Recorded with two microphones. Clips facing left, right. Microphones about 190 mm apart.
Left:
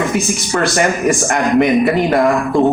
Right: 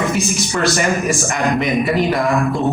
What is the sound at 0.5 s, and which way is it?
Speech, 55° left (ahead or behind).